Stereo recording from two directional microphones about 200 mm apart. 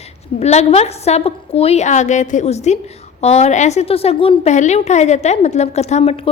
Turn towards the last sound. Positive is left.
turn(degrees=30)  # may be behind; listen again after turning